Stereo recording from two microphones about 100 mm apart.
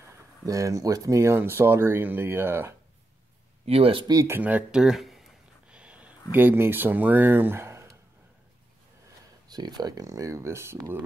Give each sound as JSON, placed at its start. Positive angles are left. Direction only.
{"t": 0.5, "sound": "speech", "side_deg": -35}
{"t": 3.6, "sound": "speech", "side_deg": -75}
{"t": 4.3, "sound": "a sound", "side_deg": -15}
{"t": 6.3, "sound": "speech", "side_deg": -20}
{"t": 9.5, "sound": "speech", "side_deg": -45}